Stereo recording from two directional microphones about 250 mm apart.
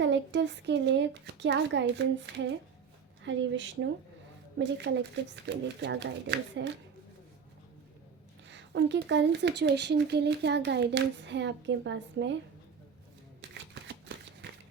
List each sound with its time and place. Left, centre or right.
0.0 s speech: right
8.4 s speech: right